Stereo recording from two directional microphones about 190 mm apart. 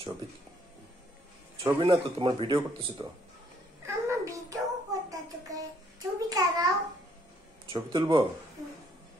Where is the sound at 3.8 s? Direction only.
15° right (ahead or behind).